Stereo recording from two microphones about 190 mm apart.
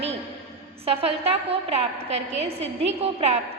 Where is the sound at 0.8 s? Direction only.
30° right (ahead or behind).